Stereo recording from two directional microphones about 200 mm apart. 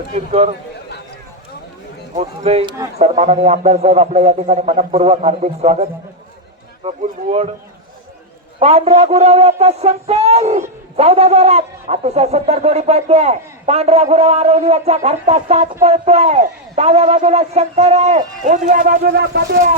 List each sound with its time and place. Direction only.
0.1 s speech: 35° right (ahead or behind)
2.1 s speech: 30° right (ahead or behind)
8.5 s speech: 30° right (ahead or behind); by 19.4 s 55° right (ahead or behind)